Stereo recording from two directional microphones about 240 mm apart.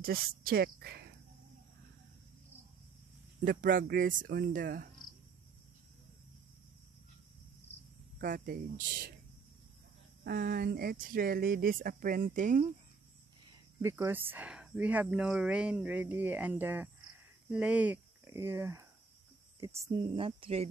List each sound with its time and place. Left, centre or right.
0.0 s speech: right
3.4 s speech: right
7.7 s cricket: left
8.2 s speech: right
10.2 s speech: right
13.5 s speech: centre